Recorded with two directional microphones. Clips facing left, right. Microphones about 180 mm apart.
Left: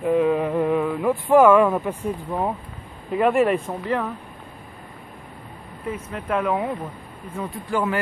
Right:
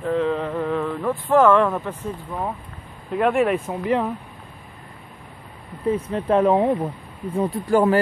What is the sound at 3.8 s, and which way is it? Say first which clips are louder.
Speech: right 3 dB; 20° right (ahead or behind).